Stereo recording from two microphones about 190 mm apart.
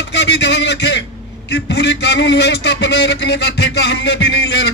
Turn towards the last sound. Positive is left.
turn(degrees=65)  # may be behind; listen again after turning